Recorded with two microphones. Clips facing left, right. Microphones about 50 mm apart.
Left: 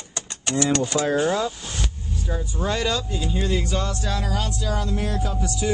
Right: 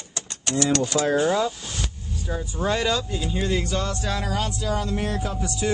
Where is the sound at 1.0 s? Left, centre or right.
Centre.